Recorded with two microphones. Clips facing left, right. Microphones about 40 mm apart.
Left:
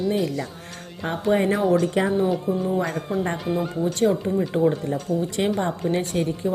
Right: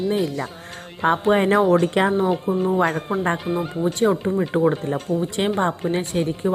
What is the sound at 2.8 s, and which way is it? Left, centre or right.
Speech, right.